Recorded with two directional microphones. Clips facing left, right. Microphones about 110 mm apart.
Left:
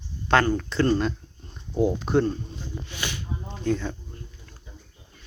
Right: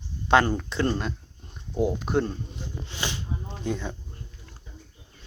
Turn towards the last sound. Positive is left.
turn(degrees=-15)  # may be behind; listen again after turning